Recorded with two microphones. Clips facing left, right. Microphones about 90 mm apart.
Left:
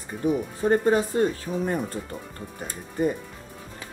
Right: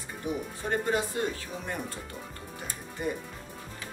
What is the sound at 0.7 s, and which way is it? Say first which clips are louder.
Speech: left 8 dB; 40° left (ahead or behind).